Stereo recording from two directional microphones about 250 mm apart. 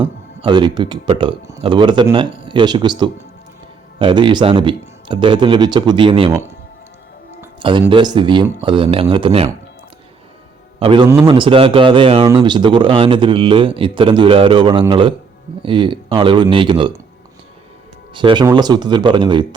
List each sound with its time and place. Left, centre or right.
0.4 s speech: centre
7.6 s speech: centre
10.8 s speech: right
18.1 s speech: centre